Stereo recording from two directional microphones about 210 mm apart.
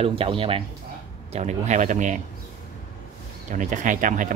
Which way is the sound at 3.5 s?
40° right (ahead or behind).